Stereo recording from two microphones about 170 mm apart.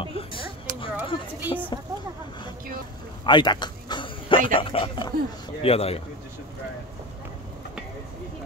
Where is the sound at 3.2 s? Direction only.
25° left (ahead or behind).